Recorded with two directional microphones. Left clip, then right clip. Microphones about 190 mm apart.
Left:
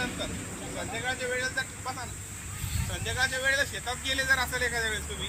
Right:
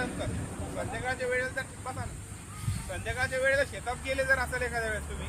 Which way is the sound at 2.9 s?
25° right (ahead or behind).